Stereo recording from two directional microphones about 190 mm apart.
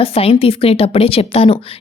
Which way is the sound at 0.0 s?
30° left (ahead or behind).